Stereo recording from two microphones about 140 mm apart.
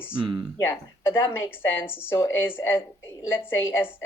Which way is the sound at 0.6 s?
20° left (ahead or behind).